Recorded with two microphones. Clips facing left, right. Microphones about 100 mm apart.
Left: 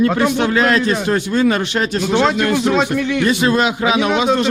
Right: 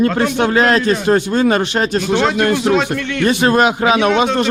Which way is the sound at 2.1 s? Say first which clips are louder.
Even; centre (ahead or behind).